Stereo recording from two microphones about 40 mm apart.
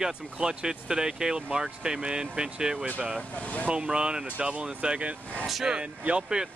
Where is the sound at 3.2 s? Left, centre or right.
Left.